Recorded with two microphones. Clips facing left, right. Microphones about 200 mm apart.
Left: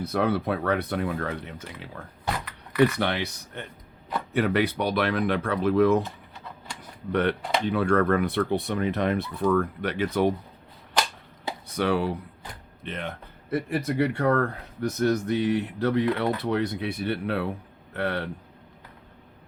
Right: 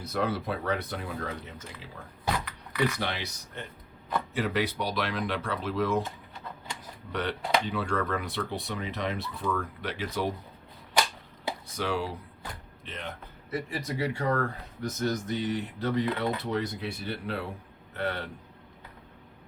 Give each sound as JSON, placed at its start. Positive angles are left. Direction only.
{"t": 0.0, "sound": "speech", "side_deg": 60}
{"t": 7.1, "sound": "speech", "side_deg": 55}
{"t": 11.8, "sound": "speech", "side_deg": 60}